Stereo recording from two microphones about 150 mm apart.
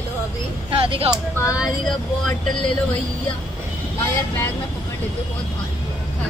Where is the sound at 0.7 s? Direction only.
40° right (ahead or behind).